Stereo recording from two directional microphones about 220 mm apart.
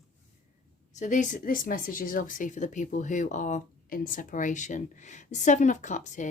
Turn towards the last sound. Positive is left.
turn(degrees=35)  # may be behind; listen again after turning